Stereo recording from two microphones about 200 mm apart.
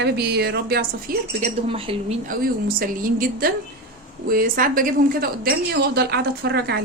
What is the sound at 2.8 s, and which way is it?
A woman's voice, 45° right (ahead or behind).